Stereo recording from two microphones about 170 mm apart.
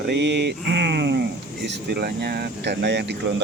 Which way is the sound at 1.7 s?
70° right (ahead or behind).